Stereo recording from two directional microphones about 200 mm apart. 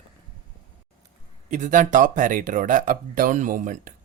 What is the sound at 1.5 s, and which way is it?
Speech, 40° right (ahead or behind).